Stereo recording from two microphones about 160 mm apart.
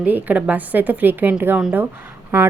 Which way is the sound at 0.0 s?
10° right (ahead or behind).